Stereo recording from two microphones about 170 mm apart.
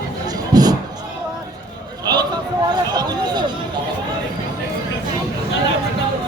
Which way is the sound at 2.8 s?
25° right (ahead or behind).